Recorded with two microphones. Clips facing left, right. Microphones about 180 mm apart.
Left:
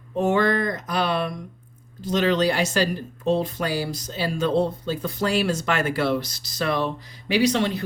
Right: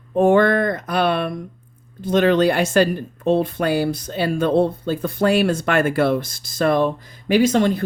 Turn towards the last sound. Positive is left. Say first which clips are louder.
# right 5 dB
turn(degrees=-50)  # may be behind; listen again after turning